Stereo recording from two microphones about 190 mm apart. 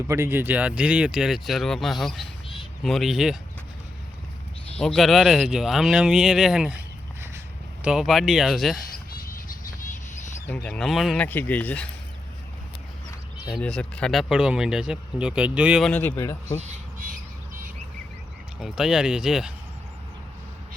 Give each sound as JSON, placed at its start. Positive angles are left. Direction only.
{"t": 0.1, "sound": "speech", "side_deg": -10}
{"t": 4.8, "sound": "speech", "side_deg": 5}
{"t": 7.9, "sound": "speech", "side_deg": 0}
{"t": 10.7, "sound": "speech", "side_deg": 0}
{"t": 13.6, "sound": "speech", "side_deg": 5}
{"t": 15.9, "sound": "speech", "side_deg": 10}
{"t": 16.6, "sound": "squawk", "side_deg": -45}
{"t": 18.6, "sound": "speech", "side_deg": 0}